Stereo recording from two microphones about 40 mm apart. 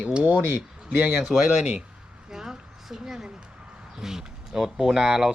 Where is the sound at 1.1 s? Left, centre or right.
Centre.